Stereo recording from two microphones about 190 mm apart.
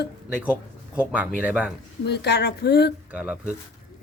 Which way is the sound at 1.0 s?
5° right (ahead or behind).